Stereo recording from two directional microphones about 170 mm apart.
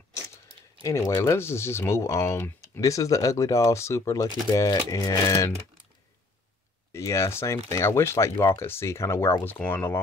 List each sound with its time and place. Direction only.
0.8 s speech: 20° left (ahead or behind)
6.9 s speech: 15° left (ahead or behind)